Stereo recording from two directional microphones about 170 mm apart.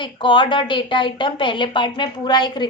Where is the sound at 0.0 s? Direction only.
30° left (ahead or behind).